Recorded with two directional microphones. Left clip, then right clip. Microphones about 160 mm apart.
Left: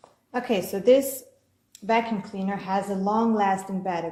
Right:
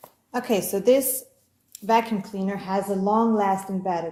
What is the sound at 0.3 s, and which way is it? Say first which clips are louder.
A woman's voice: right 2 dB; 35° right (ahead or behind).